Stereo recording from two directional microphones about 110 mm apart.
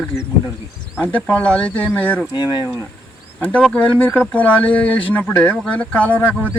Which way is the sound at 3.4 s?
10° left (ahead or behind).